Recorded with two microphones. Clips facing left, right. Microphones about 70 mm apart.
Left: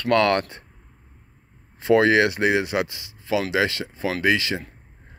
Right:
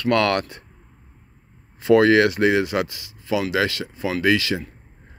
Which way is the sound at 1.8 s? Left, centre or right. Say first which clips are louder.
Right 2 dB; left.